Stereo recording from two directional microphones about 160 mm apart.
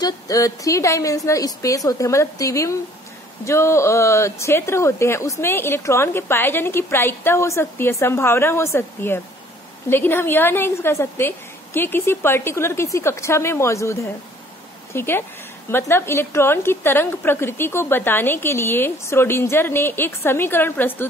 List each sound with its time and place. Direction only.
0.0 s a woman's voice: 20° left (ahead or behind)